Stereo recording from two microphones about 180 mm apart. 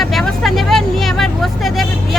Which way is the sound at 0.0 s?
Centre (ahead or behind).